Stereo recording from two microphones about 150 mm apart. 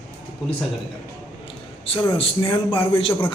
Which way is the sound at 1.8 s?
40° left (ahead or behind).